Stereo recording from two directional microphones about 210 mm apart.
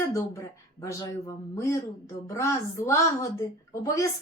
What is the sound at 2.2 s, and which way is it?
Speech, 15° left (ahead or behind).